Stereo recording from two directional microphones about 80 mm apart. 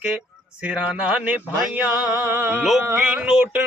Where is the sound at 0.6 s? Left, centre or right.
Centre.